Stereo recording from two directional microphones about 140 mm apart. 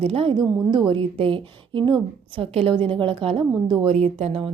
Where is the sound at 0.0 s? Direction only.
45° right (ahead or behind).